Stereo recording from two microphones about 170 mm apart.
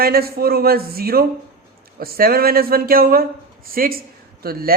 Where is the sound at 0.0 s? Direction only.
65° right (ahead or behind).